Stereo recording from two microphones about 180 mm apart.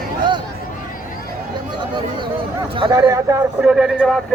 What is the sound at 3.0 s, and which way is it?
Speech, 15° right (ahead or behind).